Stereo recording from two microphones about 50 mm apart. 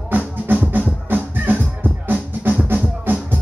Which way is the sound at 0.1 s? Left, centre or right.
Right.